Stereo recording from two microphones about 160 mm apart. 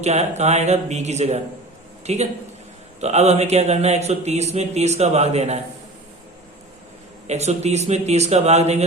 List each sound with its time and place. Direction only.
0.0 s a man's voice: 45° right (ahead or behind)
7.3 s speech: 45° right (ahead or behind)